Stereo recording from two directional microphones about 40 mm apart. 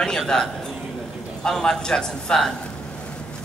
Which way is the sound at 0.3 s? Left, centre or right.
Centre.